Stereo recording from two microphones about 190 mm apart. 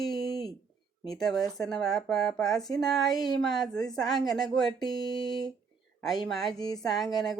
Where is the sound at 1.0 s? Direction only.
20° left (ahead or behind).